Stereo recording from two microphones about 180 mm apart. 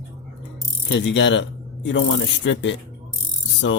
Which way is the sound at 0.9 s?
90° left.